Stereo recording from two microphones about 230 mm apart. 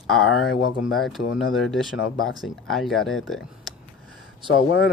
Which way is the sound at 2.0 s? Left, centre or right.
Left.